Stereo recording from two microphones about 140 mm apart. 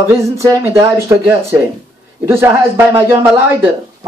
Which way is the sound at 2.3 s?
15° right (ahead or behind).